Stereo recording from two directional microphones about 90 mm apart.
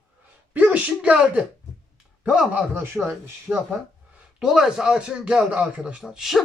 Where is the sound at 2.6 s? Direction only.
25° right (ahead or behind).